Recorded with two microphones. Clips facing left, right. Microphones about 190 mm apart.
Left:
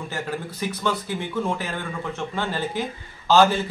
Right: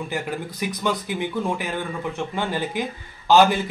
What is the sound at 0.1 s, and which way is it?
A man's voice, 15° right (ahead or behind).